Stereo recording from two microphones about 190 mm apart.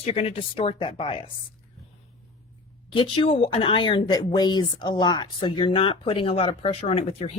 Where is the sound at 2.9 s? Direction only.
30° left (ahead or behind).